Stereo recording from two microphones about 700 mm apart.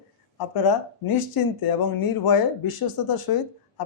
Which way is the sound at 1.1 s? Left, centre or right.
Left.